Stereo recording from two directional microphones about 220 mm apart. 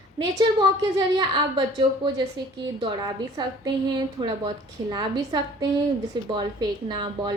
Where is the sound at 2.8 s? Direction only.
20° right (ahead or behind).